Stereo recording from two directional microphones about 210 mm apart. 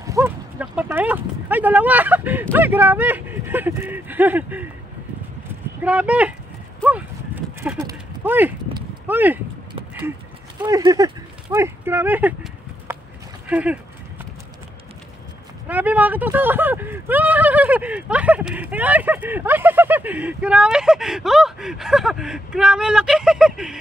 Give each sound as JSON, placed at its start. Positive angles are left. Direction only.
{"t": 0.0, "sound": "a sound", "side_deg": -15}
{"t": 2.5, "sound": "speech", "side_deg": -10}
{"t": 5.8, "sound": "speech", "side_deg": -5}
{"t": 6.8, "sound": "clip-clop", "side_deg": -5}
{"t": 9.0, "sound": "speech", "side_deg": -10}
{"t": 10.6, "sound": "speech", "side_deg": -20}
{"t": 12.9, "sound": "a sound", "side_deg": -10}
{"t": 13.5, "sound": "speech", "side_deg": -5}
{"t": 15.7, "sound": "speech", "side_deg": -10}